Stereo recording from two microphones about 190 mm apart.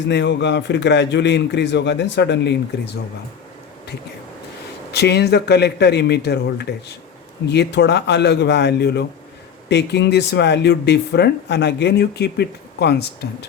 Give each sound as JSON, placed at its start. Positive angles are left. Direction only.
{"t": 0.1, "sound": "a man's voice", "side_deg": 70}
{"t": 4.9, "sound": "speech", "side_deg": 60}